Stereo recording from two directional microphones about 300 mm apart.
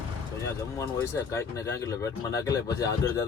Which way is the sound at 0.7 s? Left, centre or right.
Centre.